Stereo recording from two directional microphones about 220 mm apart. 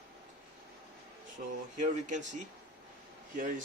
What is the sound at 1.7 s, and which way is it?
Speech, 35° right (ahead or behind).